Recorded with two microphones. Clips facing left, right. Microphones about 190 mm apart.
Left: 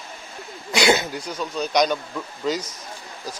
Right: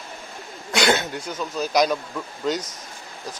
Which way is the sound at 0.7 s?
Centre (ahead or behind).